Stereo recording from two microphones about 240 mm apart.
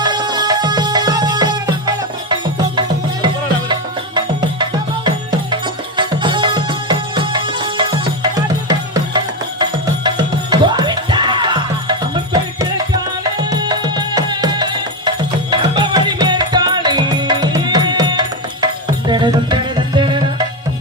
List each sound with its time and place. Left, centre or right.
0.0 s music: centre
6.0 s music: centre